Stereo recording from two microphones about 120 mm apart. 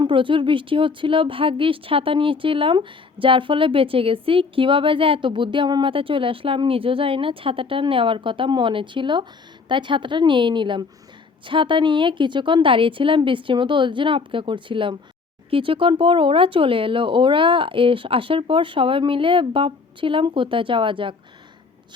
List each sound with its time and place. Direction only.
0.0 s a woman's voice: 45° right (ahead or behind)